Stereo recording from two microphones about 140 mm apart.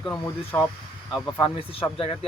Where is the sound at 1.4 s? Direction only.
40° left (ahead or behind).